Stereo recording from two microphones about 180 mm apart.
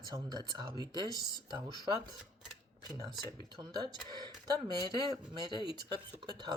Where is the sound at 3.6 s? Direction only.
20° right (ahead or behind).